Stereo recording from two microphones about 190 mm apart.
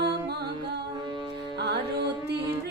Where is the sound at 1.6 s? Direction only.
60° right (ahead or behind).